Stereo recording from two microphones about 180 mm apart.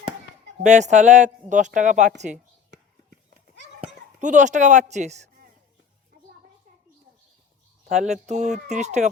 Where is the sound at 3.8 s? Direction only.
45° right (ahead or behind).